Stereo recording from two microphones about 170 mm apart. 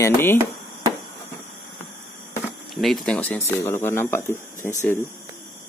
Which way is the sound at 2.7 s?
Centre (ahead or behind).